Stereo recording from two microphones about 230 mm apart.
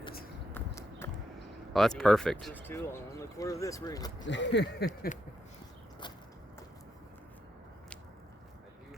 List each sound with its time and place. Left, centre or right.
0.5 s clip-clop: centre
1.7 s speech: centre
4.3 s speech: left